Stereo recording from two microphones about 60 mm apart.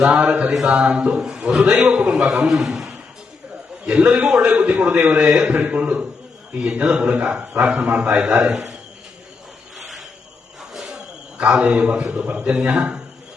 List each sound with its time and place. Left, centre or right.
0.0 s a man's voice: centre
0.3 s a man's voice: right
0.5 s a man's voice: centre
0.9 s a man's voice: centre
2.5 s a man's voice: centre
10.8 s a sound: centre
11.3 s a man's voice: centre